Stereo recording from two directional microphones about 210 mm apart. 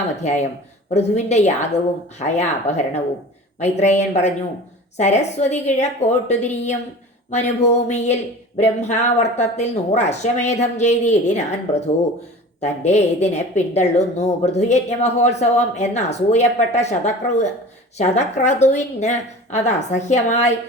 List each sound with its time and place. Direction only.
0.2 s speech: 35° left (ahead or behind)